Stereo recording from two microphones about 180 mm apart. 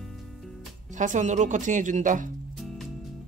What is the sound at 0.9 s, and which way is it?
Speech, 45° right (ahead or behind).